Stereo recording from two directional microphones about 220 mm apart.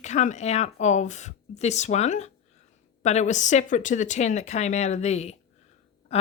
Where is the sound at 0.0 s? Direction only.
30° left (ahead or behind).